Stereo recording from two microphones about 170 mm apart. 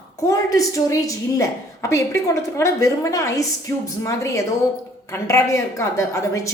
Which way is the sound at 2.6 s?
20° left (ahead or behind).